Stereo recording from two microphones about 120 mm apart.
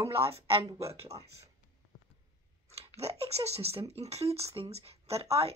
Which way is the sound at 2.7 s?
60° right (ahead or behind).